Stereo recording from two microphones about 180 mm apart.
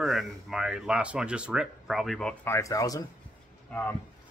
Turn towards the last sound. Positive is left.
turn(degrees=10)  # may be behind; listen again after turning